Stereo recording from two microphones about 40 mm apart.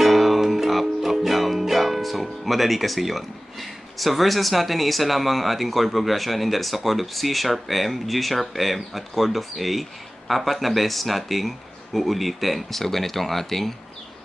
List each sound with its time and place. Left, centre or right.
0.0 s music: centre